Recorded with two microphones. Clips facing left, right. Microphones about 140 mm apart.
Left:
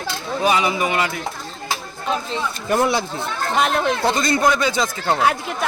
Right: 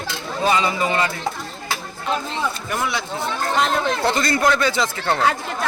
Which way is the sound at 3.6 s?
15° left (ahead or behind).